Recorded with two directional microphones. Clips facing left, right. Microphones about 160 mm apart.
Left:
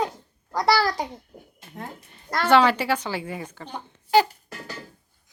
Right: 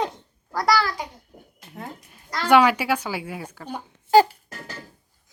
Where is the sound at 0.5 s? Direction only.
30° left (ahead or behind).